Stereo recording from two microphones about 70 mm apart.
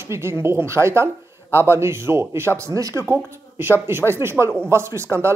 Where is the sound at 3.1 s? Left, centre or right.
Right.